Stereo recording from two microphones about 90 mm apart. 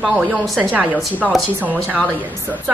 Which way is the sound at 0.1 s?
15° right (ahead or behind).